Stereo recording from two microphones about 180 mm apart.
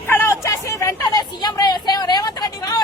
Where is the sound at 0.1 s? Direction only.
10° left (ahead or behind).